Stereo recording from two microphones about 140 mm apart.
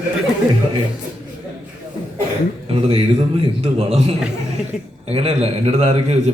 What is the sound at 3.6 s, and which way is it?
A man's voice, 45° right (ahead or behind).